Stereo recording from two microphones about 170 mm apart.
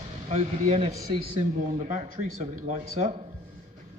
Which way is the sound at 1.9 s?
45° right (ahead or behind).